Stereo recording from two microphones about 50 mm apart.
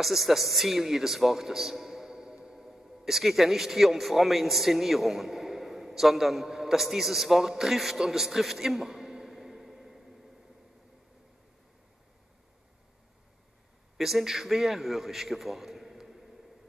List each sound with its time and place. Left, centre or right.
0.0 s speech: centre
13.9 s a man's voice: centre